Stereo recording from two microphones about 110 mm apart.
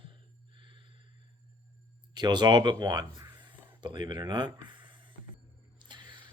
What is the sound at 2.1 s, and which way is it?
Speech, 40° right (ahead or behind).